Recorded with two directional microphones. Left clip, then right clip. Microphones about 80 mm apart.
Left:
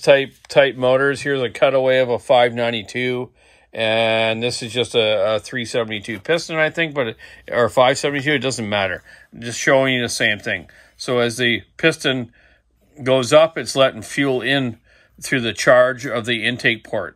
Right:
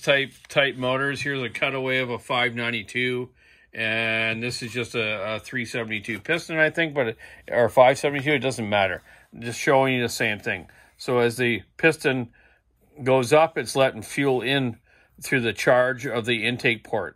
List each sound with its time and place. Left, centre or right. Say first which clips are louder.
0.7 s speech: left 8 dB; left
1.6 s speech: left 11 dB; left
6.3 s speech: left 3 dB; centre